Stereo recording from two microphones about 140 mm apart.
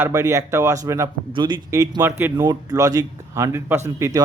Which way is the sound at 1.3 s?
35° right (ahead or behind).